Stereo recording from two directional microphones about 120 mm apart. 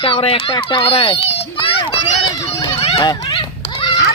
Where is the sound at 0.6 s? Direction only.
50° left (ahead or behind).